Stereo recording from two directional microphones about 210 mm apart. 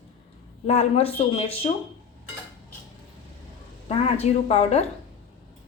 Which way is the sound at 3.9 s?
30° left (ahead or behind).